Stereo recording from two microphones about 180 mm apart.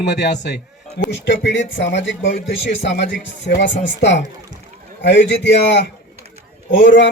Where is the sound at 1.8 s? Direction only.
85° left.